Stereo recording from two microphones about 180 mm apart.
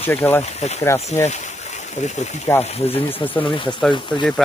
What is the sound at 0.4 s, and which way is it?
Speech, 35° left (ahead or behind).